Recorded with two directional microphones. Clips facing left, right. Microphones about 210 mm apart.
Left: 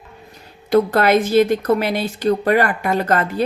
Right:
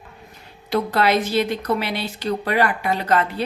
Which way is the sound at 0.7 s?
50° left (ahead or behind).